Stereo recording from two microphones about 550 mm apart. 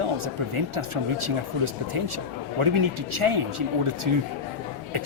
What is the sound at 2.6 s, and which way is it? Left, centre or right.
A man's voice, right.